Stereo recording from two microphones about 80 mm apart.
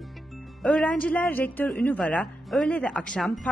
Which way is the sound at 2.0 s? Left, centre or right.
Centre.